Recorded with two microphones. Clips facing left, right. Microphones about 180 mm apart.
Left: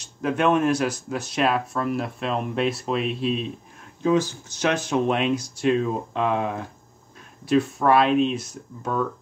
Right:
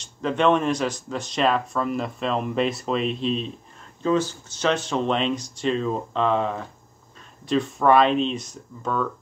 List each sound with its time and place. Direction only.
0.0 s speech: 10° left (ahead or behind)